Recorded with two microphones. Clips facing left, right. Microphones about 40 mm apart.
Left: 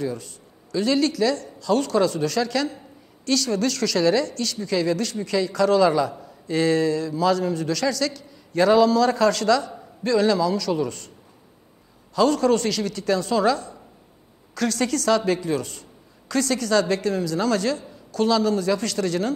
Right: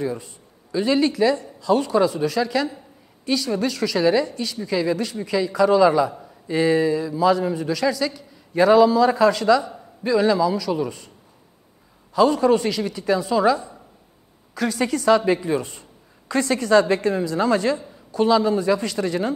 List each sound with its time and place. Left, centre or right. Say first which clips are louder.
0.0 s a woman's voice: right 2 dB; right
12.1 s a woman's voice: right 2 dB; centre